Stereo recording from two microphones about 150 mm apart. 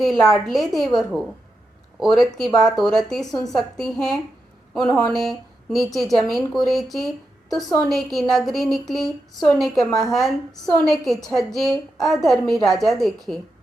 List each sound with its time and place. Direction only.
0.0 s a woman's voice: centre (ahead or behind)